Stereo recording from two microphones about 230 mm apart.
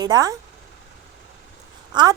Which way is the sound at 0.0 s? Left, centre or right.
Centre.